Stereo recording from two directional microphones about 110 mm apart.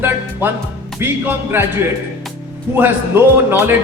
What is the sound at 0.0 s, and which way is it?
Speech, 20° right (ahead or behind).